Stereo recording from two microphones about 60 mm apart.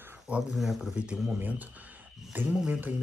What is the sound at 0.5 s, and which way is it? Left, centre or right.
Speech, centre.